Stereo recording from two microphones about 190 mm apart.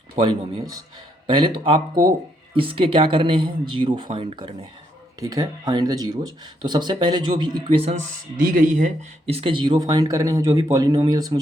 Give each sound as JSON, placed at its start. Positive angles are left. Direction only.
{"t": 0.2, "sound": "speech", "side_deg": -25}
{"t": 8.4, "sound": "speech", "side_deg": -45}